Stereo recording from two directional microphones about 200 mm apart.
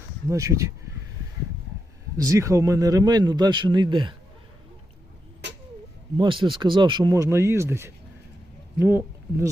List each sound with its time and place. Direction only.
0.3 s speech: 15° right (ahead or behind)
2.1 s a man's voice: 15° right (ahead or behind)
6.1 s a man's voice: 25° right (ahead or behind)